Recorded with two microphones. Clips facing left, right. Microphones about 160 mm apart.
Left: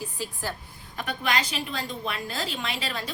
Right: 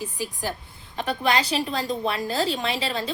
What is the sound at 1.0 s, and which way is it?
A woman's voice, 30° right (ahead or behind).